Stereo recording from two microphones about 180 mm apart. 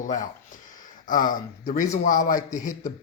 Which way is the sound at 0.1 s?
50° left (ahead or behind).